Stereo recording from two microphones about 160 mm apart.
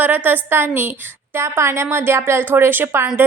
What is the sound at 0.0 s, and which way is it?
A woman's voice, 10° right (ahead or behind).